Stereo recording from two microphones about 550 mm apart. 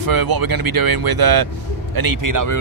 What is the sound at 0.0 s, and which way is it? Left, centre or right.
Speech, right.